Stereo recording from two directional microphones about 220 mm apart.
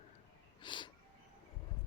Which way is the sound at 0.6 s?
20° left (ahead or behind).